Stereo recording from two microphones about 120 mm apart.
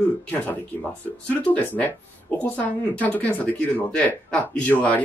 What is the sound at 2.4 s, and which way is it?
Speech, 15° left (ahead or behind).